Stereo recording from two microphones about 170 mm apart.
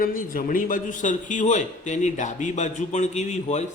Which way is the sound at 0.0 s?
55° left (ahead or behind).